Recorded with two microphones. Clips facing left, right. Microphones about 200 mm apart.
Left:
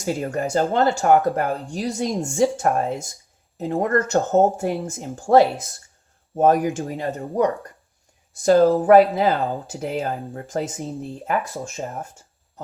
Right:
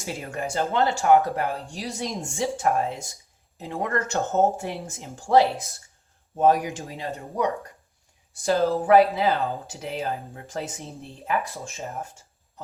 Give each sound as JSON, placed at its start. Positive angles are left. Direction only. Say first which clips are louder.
{"t": 0.0, "sound": "speech", "louder": "left 7 dB", "side_deg": 45}